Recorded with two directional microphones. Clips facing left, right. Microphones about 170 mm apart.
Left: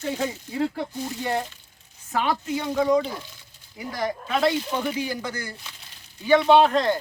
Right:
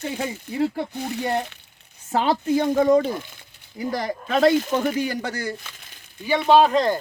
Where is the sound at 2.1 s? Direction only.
30° right (ahead or behind).